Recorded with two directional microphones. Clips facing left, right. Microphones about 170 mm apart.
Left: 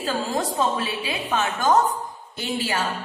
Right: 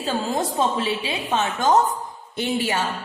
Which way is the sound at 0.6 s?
25° right (ahead or behind).